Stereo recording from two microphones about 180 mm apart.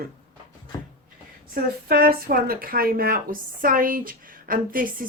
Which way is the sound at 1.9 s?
55° right (ahead or behind).